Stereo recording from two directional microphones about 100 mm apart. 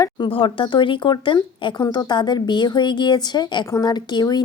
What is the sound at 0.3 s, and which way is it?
A woman's voice, 60° left (ahead or behind).